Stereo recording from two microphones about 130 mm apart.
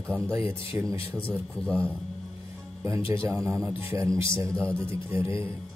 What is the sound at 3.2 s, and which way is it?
A man's voice, 20° right (ahead or behind).